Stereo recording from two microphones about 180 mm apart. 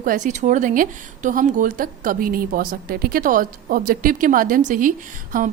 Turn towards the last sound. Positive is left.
turn(degrees=-50)  # may be behind; listen again after turning